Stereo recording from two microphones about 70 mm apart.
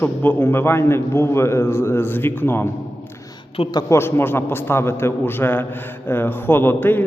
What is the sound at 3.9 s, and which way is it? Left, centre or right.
A man's voice, left.